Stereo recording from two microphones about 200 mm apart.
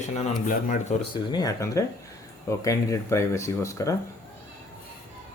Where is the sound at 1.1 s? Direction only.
20° left (ahead or behind).